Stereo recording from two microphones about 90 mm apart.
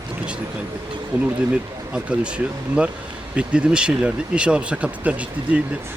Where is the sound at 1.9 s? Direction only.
10° right (ahead or behind).